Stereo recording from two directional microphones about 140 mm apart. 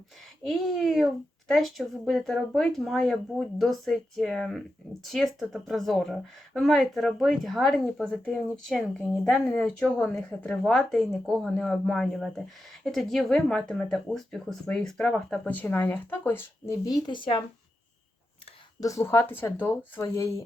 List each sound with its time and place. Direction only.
0.4 s speech: centre (ahead or behind)
16.8 s speech: 30° left (ahead or behind)
18.8 s speech: 20° left (ahead or behind)